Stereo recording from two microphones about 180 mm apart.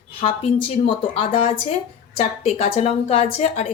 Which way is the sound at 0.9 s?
30° left (ahead or behind).